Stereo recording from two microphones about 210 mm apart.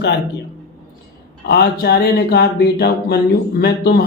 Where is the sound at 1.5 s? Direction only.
45° left (ahead or behind).